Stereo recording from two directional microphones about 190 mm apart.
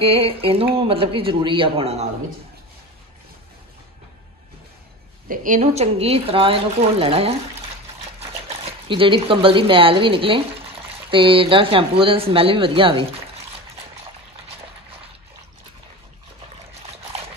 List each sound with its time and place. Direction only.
0.0 s speech: 30° right (ahead or behind)
5.3 s speech: 45° right (ahead or behind); by 13.0 s 30° right (ahead or behind)